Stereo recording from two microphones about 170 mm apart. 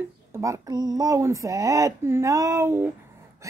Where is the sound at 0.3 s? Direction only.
20° right (ahead or behind).